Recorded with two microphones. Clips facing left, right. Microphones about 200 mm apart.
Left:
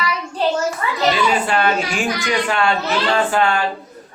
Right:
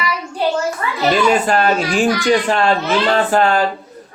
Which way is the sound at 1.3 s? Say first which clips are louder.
Right 3 dB; 40° right (ahead or behind).